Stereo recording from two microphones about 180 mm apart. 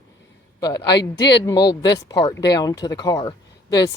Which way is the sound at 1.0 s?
70° left (ahead or behind).